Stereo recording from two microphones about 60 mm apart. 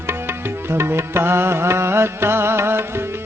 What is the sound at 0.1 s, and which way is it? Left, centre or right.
Music, right.